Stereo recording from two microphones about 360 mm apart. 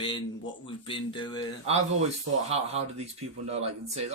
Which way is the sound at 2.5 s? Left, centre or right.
Centre.